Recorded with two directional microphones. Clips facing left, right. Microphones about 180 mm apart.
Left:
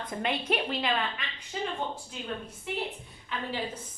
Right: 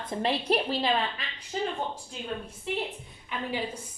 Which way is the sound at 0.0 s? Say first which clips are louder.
Right 3 dB; 35° right (ahead or behind).